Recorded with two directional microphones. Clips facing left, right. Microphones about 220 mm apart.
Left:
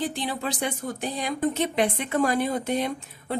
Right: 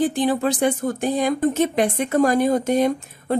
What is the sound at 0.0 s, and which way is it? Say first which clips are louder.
Speech: right 9 dB; 50° right (ahead or behind).